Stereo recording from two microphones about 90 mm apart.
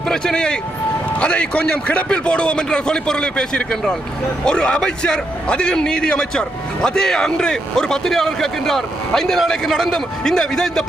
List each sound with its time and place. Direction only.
0.1 s a man's voice: 10° left (ahead or behind)